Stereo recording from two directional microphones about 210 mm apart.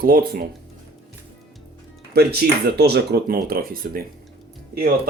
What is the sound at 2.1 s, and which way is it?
Speech, 50° right (ahead or behind).